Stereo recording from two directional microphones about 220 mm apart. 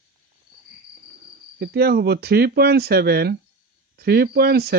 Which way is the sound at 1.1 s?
45° right (ahead or behind).